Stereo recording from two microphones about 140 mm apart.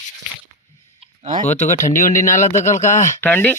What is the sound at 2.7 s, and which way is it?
Speech, 60° left (ahead or behind).